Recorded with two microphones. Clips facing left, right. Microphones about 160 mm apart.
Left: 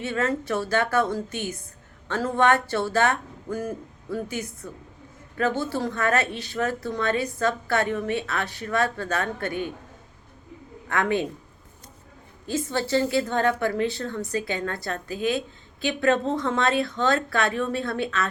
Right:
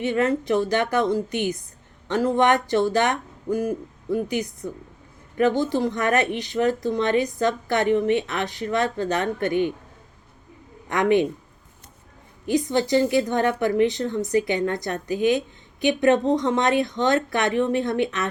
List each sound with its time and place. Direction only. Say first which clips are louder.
0.0 s a woman's voice: right 4 dB; 15° right (ahead or behind)
10.8 s speech: right 5 dB; 20° right (ahead or behind)
12.5 s a woman's voice: right 5 dB; 15° right (ahead or behind)